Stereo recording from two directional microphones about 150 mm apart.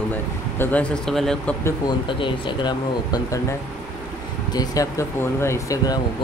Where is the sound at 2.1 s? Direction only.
35° left (ahead or behind).